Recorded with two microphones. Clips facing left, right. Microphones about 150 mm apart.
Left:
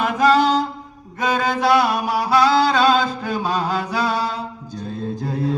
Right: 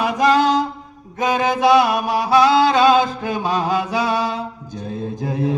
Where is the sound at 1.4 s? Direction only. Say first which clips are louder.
Right 3 dB; 20° right (ahead or behind).